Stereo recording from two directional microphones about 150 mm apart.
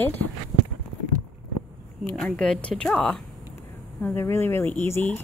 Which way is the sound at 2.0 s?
5° left (ahead or behind).